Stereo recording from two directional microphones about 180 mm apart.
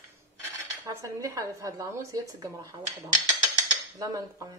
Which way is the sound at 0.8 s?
20° right (ahead or behind).